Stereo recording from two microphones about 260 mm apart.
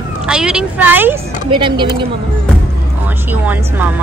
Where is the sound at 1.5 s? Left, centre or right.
Centre.